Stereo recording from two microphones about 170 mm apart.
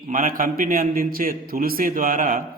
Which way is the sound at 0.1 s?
55° right (ahead or behind).